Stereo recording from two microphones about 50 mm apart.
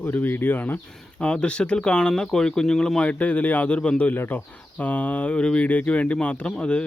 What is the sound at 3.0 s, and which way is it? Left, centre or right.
Speech, left.